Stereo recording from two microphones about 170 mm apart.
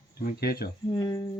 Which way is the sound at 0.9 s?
25° left (ahead or behind).